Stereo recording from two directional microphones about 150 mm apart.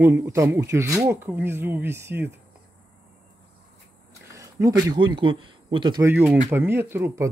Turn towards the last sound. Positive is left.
turn(degrees=-20)  # may be behind; listen again after turning